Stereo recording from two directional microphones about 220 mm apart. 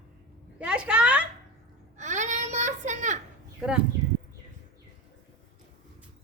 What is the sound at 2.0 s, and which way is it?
Baby cry, 35° right (ahead or behind).